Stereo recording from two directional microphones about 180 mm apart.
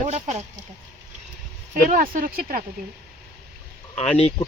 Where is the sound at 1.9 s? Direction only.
50° right (ahead or behind).